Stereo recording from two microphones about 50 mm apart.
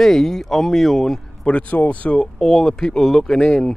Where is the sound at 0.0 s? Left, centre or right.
Centre.